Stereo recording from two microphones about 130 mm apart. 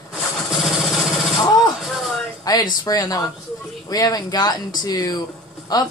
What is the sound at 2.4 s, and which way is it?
Speech, 30° left (ahead or behind).